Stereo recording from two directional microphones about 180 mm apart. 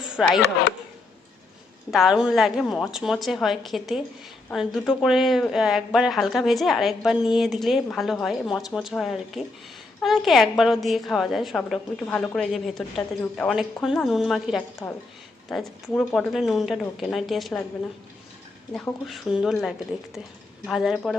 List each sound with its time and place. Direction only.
0.2 s a woman's voice: 5° right (ahead or behind)
1.9 s a woman's voice: centre (ahead or behind)
19.0 s a woman's voice: centre (ahead or behind)